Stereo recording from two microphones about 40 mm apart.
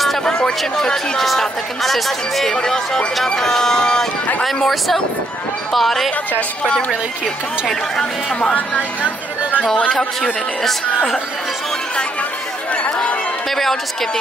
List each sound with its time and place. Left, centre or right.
0.2 s a sound: centre
0.6 s speech: centre
2.5 s speech: centre
4.6 s speech: centre
7.6 s speech: centre
13.5 s a sound: centre